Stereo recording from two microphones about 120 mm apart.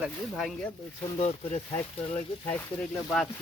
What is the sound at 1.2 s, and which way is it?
Speech, 75° left (ahead or behind).